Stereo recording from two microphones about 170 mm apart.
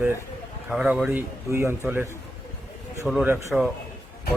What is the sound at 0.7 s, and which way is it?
Speech, 5° right (ahead or behind).